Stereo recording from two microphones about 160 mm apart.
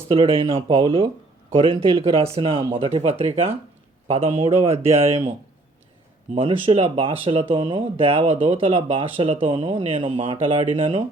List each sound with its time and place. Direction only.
0.1 s speech: 35° right (ahead or behind)
6.3 s speech: 35° right (ahead or behind)